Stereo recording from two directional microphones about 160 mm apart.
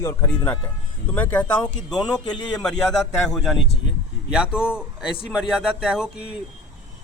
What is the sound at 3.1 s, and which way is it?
A man's voice, 5° left (ahead or behind).